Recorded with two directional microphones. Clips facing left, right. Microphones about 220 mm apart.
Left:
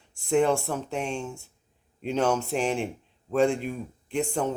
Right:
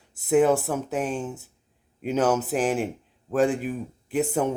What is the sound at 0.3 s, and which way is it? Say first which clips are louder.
Speech: right 3 dB; 5° right (ahead or behind).